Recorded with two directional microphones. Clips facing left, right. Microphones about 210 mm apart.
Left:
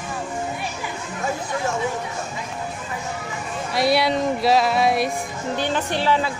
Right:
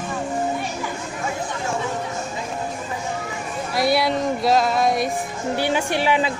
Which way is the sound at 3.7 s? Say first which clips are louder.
Even; centre (ahead or behind).